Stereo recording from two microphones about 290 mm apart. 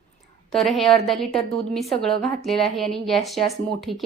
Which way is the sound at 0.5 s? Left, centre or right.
Centre.